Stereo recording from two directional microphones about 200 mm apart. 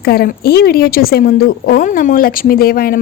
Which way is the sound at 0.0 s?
50° left (ahead or behind).